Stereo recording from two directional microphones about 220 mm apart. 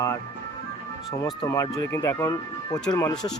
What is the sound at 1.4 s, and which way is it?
Speech, 15° left (ahead or behind).